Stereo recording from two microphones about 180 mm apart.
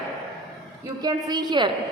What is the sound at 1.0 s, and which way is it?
Speech, 25° right (ahead or behind).